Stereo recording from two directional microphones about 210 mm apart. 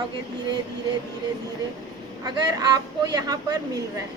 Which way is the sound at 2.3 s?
20° right (ahead or behind).